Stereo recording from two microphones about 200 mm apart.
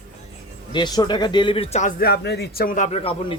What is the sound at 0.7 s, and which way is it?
Speech, 20° left (ahead or behind).